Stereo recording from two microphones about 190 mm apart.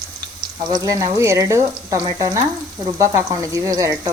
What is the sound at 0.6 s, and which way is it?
Speech, 20° right (ahead or behind).